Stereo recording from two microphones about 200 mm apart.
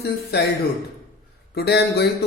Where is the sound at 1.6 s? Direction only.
55° left (ahead or behind).